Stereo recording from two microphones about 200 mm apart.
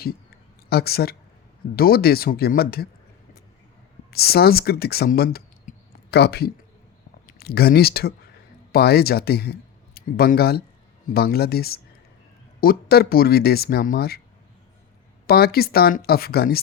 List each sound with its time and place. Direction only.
0.7 s speech: 50° left (ahead or behind)
4.1 s speech: 50° left (ahead or behind)
15.3 s speech: 50° left (ahead or behind)